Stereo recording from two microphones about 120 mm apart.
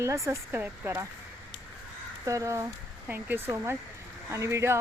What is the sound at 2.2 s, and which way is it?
Speech, 25° right (ahead or behind).